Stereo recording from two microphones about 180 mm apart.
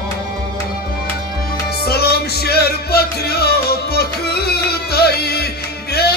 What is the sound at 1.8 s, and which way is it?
Music, 60° left (ahead or behind).